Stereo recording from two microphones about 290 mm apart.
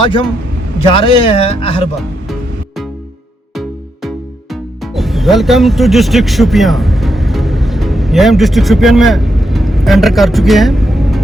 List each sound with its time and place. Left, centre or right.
0.0 s a man's voice: centre
4.9 s speech: centre